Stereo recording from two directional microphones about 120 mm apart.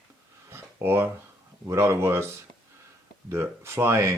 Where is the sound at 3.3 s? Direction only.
20° right (ahead or behind).